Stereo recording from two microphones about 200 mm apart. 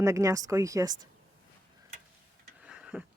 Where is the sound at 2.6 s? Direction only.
5° right (ahead or behind).